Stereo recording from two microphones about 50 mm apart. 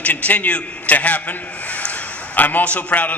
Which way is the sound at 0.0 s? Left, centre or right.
Left.